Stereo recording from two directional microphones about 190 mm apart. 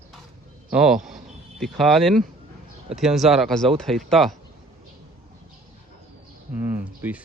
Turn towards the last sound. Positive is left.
turn(degrees=-10)  # may be behind; listen again after turning